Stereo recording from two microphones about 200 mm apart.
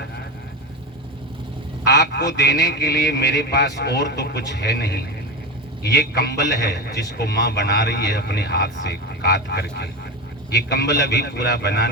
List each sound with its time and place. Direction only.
1.9 s a man's voice: 55° left (ahead or behind)